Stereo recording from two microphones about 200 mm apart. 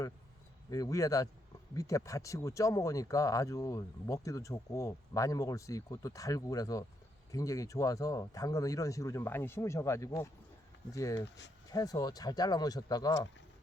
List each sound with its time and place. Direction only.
0.7 s speech: 15° left (ahead or behind)